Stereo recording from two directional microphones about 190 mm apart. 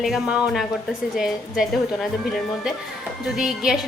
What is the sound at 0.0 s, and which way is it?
A woman's voice, centre (ahead or behind).